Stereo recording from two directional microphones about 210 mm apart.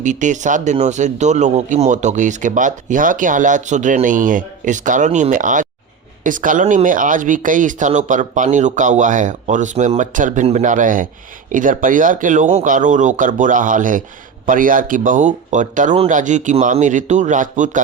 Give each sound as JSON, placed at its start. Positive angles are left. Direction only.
{"t": 0.0, "sound": "speech", "side_deg": -35}